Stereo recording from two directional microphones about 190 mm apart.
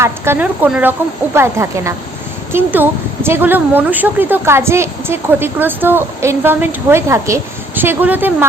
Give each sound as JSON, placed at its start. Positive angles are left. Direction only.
{"t": 0.0, "sound": "a woman's voice", "side_deg": -10}